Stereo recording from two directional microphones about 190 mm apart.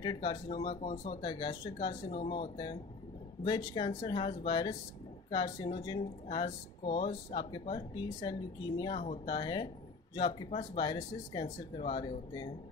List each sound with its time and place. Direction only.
0.0 s speech: 25° left (ahead or behind)